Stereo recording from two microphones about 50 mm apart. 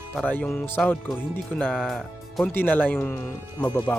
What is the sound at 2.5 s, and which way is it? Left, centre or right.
Speech, left.